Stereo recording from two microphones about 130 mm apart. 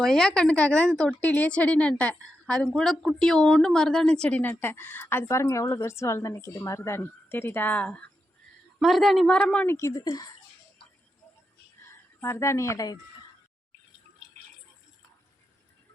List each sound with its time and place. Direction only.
0.0 s a woman's voice: 5° left (ahead or behind)
9.7 s speech: 25° left (ahead or behind)
11.8 s a woman's voice: 20° left (ahead or behind)